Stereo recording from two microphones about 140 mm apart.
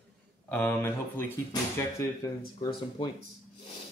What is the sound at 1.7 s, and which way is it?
Speech, 25° left (ahead or behind).